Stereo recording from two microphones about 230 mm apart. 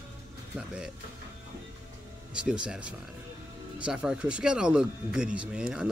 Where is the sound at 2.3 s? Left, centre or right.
Centre.